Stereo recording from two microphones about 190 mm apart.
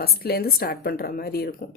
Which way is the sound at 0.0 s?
55° left (ahead or behind).